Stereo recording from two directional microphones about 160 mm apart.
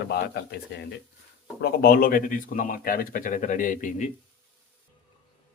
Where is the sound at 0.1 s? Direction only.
90° left.